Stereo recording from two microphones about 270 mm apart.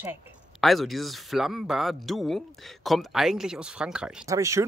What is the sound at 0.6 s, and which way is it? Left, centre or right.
Speech, centre.